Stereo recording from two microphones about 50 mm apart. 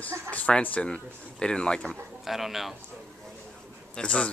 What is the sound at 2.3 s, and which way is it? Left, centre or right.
Speech, centre.